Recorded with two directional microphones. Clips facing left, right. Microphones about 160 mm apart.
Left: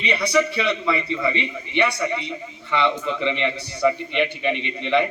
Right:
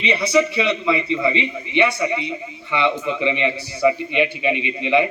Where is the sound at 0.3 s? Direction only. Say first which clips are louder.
Right 2 dB; 20° right (ahead or behind).